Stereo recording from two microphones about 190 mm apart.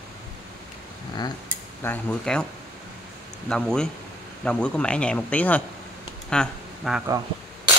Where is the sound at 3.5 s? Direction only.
5° left (ahead or behind).